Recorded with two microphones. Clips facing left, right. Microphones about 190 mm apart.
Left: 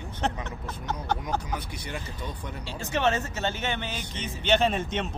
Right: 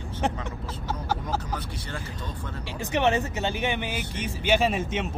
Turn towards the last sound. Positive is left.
turn(degrees=-5)  # may be behind; listen again after turning